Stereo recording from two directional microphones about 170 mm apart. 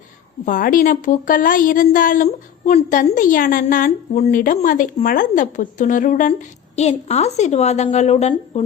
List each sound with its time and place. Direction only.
0.4 s a woman's voice: 55° left (ahead or behind); by 8.6 s 40° left (ahead or behind)